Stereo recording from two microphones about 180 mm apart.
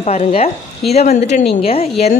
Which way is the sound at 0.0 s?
35° left (ahead or behind).